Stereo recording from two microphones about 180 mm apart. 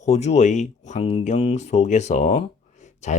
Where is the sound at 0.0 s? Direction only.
40° left (ahead or behind).